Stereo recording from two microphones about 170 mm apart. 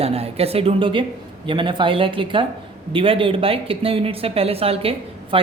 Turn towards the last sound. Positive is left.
turn(degrees=-35)  # may be behind; listen again after turning